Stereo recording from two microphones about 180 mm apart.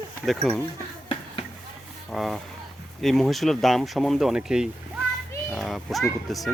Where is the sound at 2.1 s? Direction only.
Centre (ahead or behind).